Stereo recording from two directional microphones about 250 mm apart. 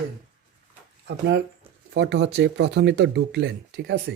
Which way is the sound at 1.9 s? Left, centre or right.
Right.